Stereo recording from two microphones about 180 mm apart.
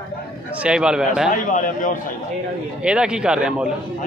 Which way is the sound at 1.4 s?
45° left (ahead or behind).